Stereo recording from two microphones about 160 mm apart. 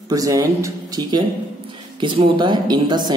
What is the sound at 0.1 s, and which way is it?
A woman's voice, 20° right (ahead or behind).